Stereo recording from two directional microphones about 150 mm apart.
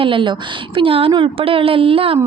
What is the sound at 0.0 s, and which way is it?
Speech, 35° right (ahead or behind).